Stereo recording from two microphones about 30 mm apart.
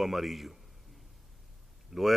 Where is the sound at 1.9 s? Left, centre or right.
Centre.